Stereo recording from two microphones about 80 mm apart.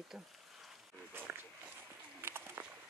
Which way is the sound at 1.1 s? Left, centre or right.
Right.